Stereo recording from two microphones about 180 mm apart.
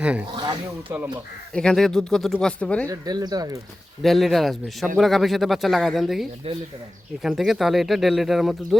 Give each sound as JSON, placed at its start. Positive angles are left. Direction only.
{"t": 0.0, "sound": "speech", "side_deg": -5}
{"t": 0.3, "sound": "speech", "side_deg": -25}
{"t": 1.5, "sound": "speech", "side_deg": 5}
{"t": 2.8, "sound": "speech", "side_deg": -20}
{"t": 4.0, "sound": "speech", "side_deg": 0}
{"t": 6.4, "sound": "speech", "side_deg": -35}
{"t": 7.2, "sound": "speech", "side_deg": 0}